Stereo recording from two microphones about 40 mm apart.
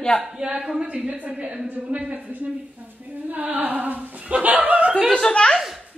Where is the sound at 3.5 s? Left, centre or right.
Right.